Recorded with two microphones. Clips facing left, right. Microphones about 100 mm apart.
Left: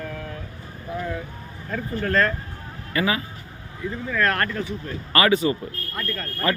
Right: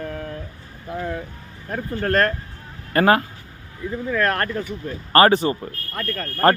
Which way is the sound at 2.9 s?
55° right (ahead or behind).